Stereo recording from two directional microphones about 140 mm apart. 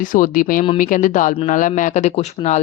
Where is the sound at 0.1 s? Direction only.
80° left.